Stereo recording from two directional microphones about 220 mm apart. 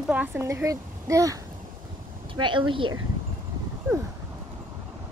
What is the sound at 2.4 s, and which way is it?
Speech, 20° right (ahead or behind).